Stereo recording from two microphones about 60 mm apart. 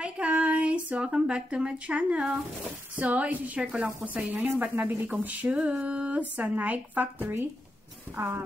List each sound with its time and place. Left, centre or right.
0.0 s speech: right
8.2 s speech: right